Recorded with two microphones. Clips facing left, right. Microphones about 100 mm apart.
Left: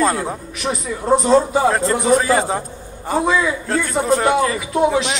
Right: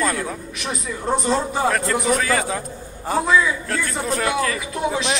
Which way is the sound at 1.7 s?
25° left (ahead or behind).